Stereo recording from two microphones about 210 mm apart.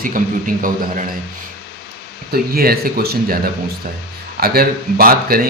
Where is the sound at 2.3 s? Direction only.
45° right (ahead or behind).